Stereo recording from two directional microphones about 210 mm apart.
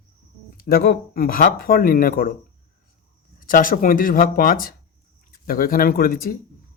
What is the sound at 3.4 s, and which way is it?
Speech, 40° left (ahead or behind).